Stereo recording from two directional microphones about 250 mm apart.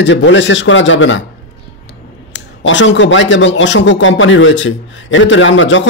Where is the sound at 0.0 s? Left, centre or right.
Left.